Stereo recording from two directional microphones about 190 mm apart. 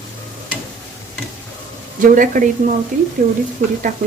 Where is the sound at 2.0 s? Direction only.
45° right (ahead or behind).